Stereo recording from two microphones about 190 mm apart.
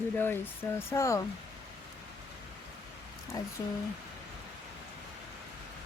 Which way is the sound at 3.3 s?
20° left (ahead or behind).